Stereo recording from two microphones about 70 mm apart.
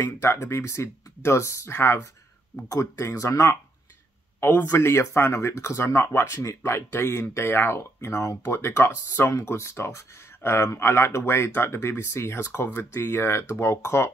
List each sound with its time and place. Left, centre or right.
0.0 s speech: left
4.4 s speech: left
4.7 s speech: left